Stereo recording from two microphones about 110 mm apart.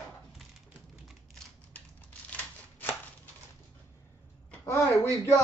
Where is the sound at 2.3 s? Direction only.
15° left (ahead or behind).